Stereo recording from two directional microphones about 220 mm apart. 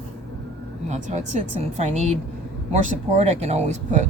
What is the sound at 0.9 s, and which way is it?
Speech, 35° right (ahead or behind).